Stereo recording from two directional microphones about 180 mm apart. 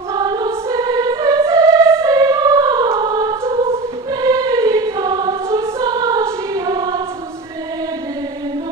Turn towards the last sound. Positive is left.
turn(degrees=-20)  # may be behind; listen again after turning